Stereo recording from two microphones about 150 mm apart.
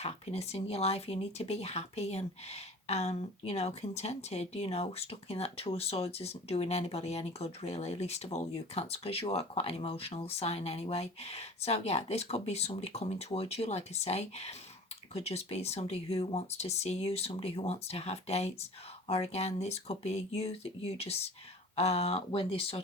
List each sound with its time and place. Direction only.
0.0 s speech: 45° left (ahead or behind)